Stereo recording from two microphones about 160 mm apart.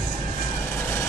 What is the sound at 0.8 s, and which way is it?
Vehicle, 15° left (ahead or behind).